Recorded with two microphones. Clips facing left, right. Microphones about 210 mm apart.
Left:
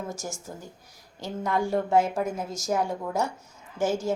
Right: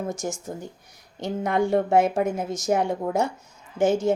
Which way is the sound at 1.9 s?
65° right (ahead or behind).